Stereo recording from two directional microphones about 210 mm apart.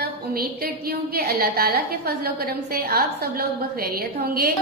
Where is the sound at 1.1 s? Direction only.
45° right (ahead or behind).